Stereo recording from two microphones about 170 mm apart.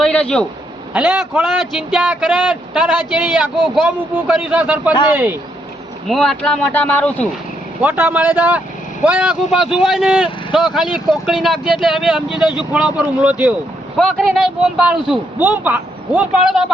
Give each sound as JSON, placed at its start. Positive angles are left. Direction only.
{"t": 0.0, "sound": "a sound", "side_deg": 5}
{"t": 0.9, "sound": "speech", "side_deg": -10}
{"t": 6.1, "sound": "speech", "side_deg": 0}
{"t": 7.8, "sound": "speech", "side_deg": -10}